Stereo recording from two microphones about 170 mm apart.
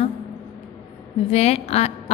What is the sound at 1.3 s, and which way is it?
Speech, 40° left (ahead or behind).